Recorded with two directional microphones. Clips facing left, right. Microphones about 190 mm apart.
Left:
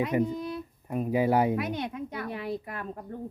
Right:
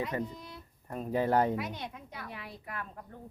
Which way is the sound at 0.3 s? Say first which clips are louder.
Left 14 dB; 65° left (ahead or behind).